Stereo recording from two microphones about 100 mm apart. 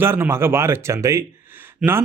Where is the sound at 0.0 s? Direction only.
25° right (ahead or behind).